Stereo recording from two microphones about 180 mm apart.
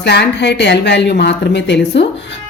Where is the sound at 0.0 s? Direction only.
70° left (ahead or behind).